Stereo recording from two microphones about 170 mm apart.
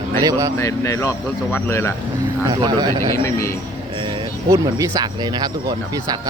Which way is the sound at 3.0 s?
15° left (ahead or behind).